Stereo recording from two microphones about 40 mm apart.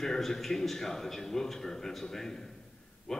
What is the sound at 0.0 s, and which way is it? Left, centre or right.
A man's voice, centre.